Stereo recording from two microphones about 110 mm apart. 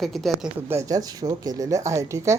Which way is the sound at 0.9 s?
35° right (ahead or behind).